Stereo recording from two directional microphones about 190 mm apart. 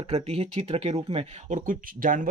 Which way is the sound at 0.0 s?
30° right (ahead or behind).